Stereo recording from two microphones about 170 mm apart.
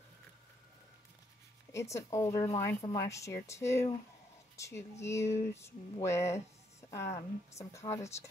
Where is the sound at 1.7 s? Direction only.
15° left (ahead or behind).